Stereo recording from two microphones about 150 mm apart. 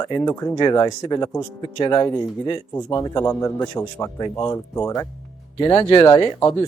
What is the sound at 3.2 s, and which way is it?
Speech, 10° left (ahead or behind).